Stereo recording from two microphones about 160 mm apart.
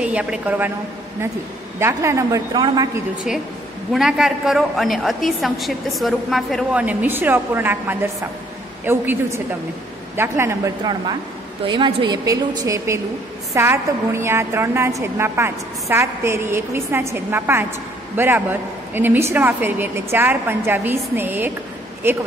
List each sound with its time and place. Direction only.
0.0 s a woman's voice: 5° right (ahead or behind)
1.8 s a woman's voice: 15° right (ahead or behind)
3.9 s a woman's voice: centre (ahead or behind)